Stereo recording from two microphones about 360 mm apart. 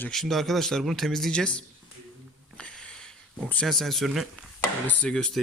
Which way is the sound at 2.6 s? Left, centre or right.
Centre.